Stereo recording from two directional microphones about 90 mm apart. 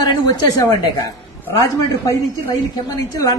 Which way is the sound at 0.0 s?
55° left (ahead or behind).